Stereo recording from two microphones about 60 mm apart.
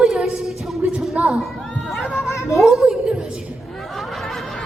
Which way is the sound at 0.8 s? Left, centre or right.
Right.